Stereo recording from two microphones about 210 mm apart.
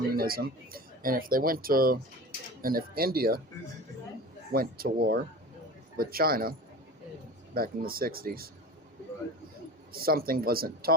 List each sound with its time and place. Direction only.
0.1 s speech: 45° right (ahead or behind)
4.5 s speech: 45° right (ahead or behind)
7.5 s speech: 45° right (ahead or behind)
9.9 s speech: 45° right (ahead or behind)